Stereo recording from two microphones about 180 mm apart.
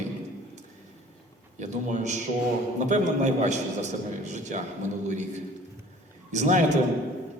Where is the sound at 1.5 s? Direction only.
40° right (ahead or behind).